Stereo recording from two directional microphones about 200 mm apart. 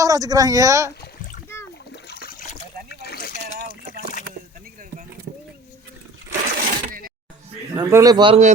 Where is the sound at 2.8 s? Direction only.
50° left (ahead or behind).